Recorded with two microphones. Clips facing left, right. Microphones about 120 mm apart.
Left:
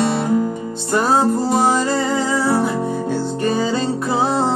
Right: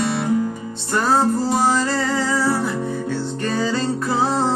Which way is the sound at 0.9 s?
15° left (ahead or behind).